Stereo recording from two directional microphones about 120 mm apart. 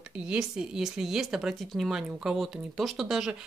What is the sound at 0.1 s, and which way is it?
Speech, 10° right (ahead or behind).